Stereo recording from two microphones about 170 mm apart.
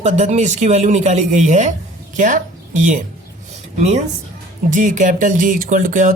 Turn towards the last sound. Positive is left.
turn(degrees=-50)  # may be behind; listen again after turning